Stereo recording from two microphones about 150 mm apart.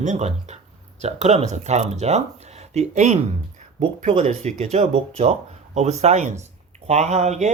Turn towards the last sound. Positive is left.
turn(degrees=-50)  # may be behind; listen again after turning